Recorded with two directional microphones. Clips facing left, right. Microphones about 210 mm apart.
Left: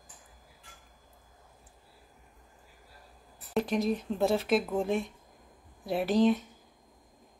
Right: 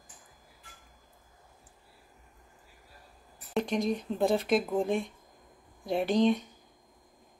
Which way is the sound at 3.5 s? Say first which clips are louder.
Left 1 dB; 5° left (ahead or behind).